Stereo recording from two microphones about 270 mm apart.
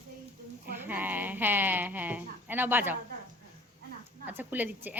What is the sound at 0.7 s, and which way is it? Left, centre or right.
Speech, centre.